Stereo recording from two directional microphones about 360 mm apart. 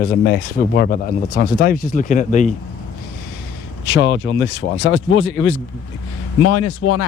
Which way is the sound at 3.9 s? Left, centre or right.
Left.